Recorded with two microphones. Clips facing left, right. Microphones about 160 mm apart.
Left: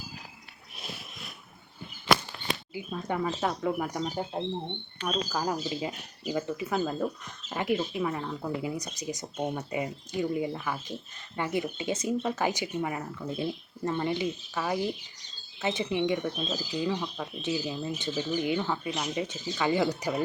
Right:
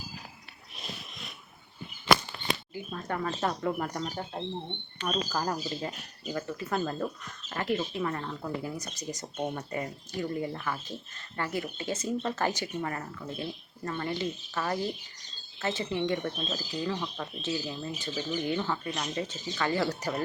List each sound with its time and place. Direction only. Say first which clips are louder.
2.7 s speech: left 2 dB; 10° left (ahead or behind)
5.0 s speech: left 1 dB; 5° left (ahead or behind)